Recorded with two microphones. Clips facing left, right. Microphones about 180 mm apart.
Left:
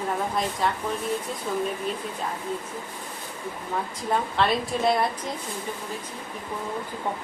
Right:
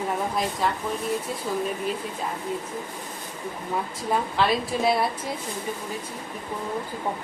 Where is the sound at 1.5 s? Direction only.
Centre (ahead or behind).